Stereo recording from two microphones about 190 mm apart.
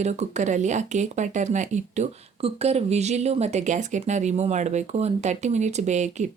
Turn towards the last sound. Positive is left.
turn(degrees=-40)  # may be behind; listen again after turning